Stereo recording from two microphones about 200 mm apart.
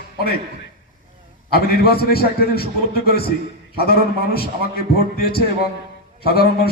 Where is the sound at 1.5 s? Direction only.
50° left (ahead or behind).